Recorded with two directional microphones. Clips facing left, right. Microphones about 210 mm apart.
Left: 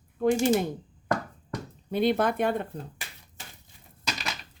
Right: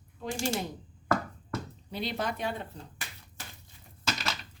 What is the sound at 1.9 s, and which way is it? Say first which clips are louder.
Speech: left 10 dB; 55° left (ahead or behind).